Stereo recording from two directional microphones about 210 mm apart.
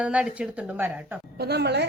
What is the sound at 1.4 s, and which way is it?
Speech, 50° right (ahead or behind).